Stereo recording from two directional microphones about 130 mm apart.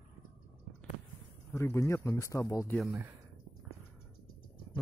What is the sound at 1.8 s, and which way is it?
Speech, 20° left (ahead or behind).